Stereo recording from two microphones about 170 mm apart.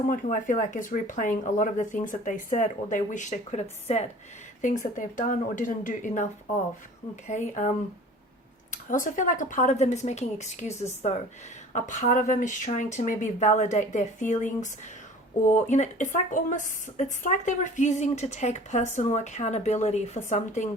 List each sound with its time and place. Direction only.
0.1 s speech: 50° left (ahead or behind)
8.7 s speech: 50° left (ahead or behind)